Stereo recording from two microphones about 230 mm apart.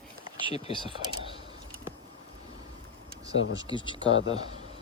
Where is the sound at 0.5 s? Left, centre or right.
Left.